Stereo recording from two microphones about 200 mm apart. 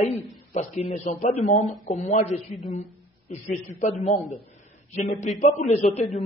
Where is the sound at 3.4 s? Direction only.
40° left (ahead or behind).